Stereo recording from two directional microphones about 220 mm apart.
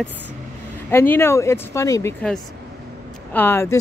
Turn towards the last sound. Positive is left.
turn(degrees=10)  # may be behind; listen again after turning